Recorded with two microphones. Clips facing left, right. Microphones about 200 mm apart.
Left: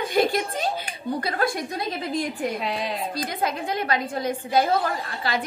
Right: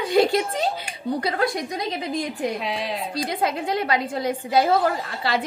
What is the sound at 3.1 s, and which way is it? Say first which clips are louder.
A woman's voice: right 2 dB; 25° right (ahead or behind).